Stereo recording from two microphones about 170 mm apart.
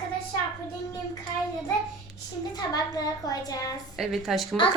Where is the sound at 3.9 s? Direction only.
Centre (ahead or behind).